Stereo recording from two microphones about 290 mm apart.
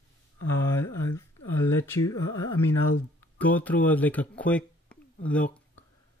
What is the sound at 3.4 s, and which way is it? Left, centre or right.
Speech, centre.